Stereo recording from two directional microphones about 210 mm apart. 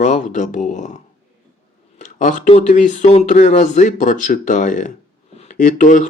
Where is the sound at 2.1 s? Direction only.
35° left (ahead or behind).